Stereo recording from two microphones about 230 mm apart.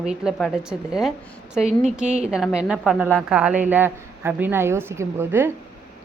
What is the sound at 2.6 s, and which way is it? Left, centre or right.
A woman's voice, centre.